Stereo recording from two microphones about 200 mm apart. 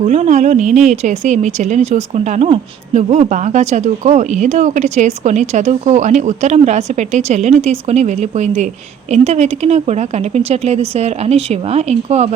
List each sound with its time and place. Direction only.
0.1 s a woman's voice: 35° right (ahead or behind)